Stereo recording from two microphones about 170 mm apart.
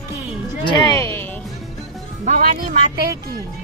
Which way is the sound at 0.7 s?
25° left (ahead or behind).